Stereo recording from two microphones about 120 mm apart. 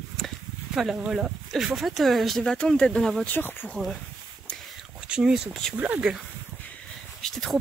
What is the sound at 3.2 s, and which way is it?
Speech, 15° left (ahead or behind).